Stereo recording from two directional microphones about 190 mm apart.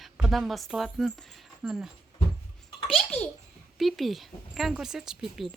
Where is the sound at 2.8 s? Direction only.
Centre (ahead or behind).